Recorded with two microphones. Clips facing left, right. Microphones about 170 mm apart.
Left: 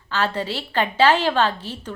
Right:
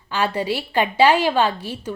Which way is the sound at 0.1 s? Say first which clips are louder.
Right 2 dB; 10° right (ahead or behind).